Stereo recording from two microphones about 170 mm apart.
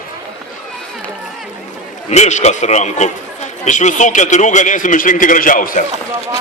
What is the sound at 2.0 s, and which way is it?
A man's voice, 40° left (ahead or behind).